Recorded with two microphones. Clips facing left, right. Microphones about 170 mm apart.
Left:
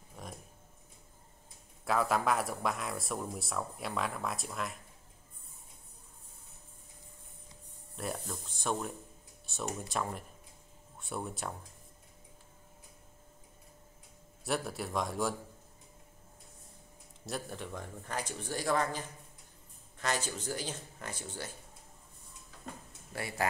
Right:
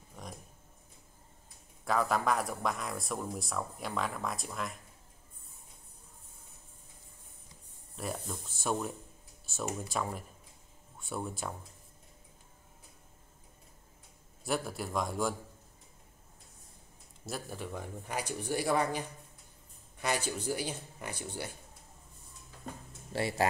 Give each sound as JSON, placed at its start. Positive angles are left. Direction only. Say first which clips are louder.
{"t": 0.1, "sound": "a sound", "louder": "even", "side_deg": 0}
{"t": 1.9, "sound": "speech", "louder": "even", "side_deg": 0}
{"t": 7.9, "sound": "speech", "louder": "even", "side_deg": 0}
{"t": 14.4, "sound": "speech", "louder": "right 1 dB", "side_deg": 0}
{"t": 17.3, "sound": "speech", "louder": "even", "side_deg": -5}
{"t": 23.1, "sound": "speech", "louder": "right 7 dB", "side_deg": -25}